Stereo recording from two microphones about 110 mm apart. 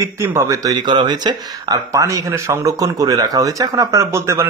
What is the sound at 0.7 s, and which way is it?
Speech, 40° right (ahead or behind).